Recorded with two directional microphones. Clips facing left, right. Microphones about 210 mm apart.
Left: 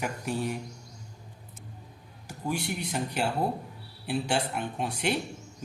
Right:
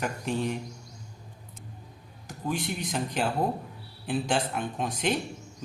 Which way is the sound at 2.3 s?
10° left (ahead or behind).